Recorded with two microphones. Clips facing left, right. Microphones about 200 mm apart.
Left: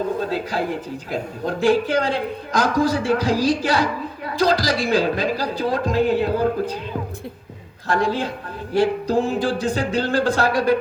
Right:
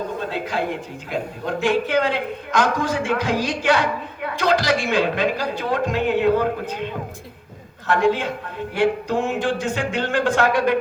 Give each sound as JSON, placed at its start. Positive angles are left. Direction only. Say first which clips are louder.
{"t": 0.3, "sound": "a woman's voice", "louder": "left 1 dB", "side_deg": 40}
{"t": 7.9, "sound": "a woman's voice", "louder": "right 2 dB", "side_deg": 35}